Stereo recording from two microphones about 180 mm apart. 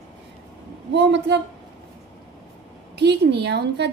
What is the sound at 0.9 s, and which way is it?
Speech, 70° right (ahead or behind).